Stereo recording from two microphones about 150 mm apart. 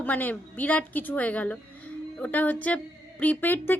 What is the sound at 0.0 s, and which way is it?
A woman's voice, 10° left (ahead or behind).